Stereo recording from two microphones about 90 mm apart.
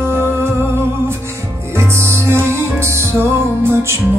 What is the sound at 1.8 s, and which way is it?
Music, 30° right (ahead or behind).